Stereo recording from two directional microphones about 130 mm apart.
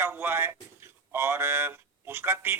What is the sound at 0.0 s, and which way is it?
Speech, 15° right (ahead or behind).